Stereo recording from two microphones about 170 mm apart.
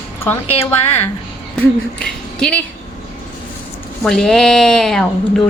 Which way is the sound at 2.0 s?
5° left (ahead or behind).